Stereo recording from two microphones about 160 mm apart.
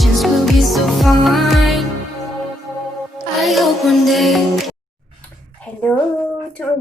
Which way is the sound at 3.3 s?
Centre (ahead or behind).